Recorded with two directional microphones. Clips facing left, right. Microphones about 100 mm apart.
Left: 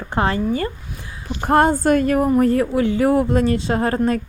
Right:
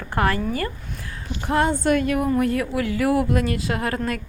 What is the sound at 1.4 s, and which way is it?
A woman's voice, 50° left (ahead or behind).